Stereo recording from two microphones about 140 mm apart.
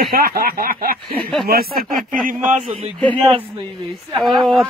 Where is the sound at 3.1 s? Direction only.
35° right (ahead or behind).